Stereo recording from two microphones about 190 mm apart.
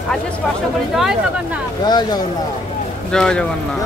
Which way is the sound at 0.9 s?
Centre (ahead or behind).